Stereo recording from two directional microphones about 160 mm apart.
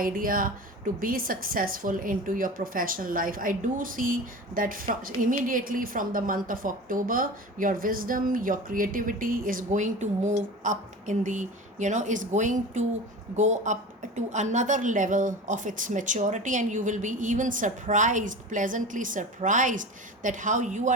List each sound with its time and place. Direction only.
0.0 s a woman's voice: 60° right (ahead or behind)